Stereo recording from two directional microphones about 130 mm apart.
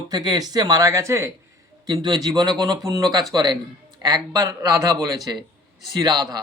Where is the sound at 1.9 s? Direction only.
35° right (ahead or behind).